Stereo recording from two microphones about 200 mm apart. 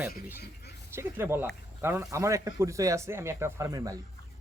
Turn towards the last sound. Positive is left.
turn(degrees=-15)  # may be behind; listen again after turning